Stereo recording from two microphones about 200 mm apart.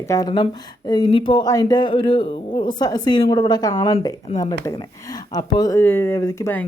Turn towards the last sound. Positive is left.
turn(degrees=15)  # may be behind; listen again after turning